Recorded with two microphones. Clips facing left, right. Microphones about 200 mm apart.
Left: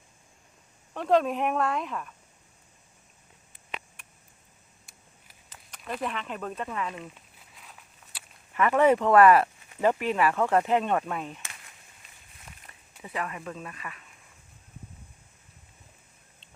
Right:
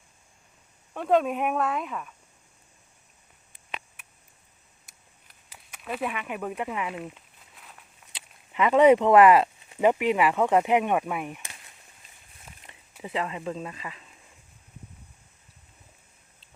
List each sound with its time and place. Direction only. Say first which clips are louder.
0.9 s speech: even; 5° right (ahead or behind)
4.0 s a sound: left 1 dB; 5° right (ahead or behind)
5.5 s speech: right 2 dB; 5° right (ahead or behind)
7.5 s walk: right 1 dB; centre (ahead or behind)
8.1 s speech: right 1 dB; 20° right (ahead or behind)
13.0 s speech: right 4 dB; 25° right (ahead or behind)